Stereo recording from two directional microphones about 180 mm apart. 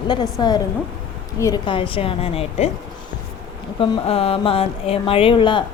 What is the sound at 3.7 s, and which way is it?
A woman's voice, 30° left (ahead or behind).